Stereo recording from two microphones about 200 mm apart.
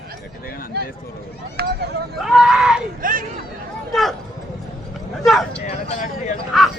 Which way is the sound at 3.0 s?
45° right (ahead or behind).